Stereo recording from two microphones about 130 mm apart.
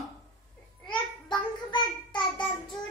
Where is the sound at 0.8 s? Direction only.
35° left (ahead or behind).